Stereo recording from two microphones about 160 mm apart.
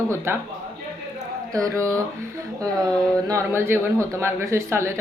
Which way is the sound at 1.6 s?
20° right (ahead or behind).